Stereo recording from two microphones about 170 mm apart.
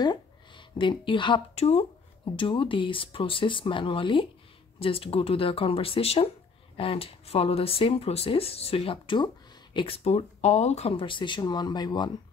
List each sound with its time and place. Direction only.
0.0 s speech: 25° left (ahead or behind)